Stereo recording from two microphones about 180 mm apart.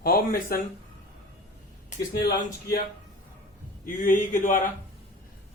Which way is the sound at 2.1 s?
60° left (ahead or behind).